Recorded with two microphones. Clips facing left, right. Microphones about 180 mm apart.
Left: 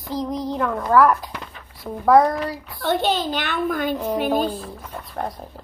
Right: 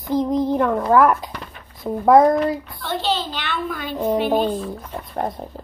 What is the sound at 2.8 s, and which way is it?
A child's voice, 50° left (ahead or behind).